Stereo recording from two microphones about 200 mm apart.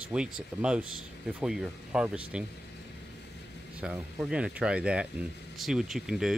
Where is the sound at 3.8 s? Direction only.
5° right (ahead or behind).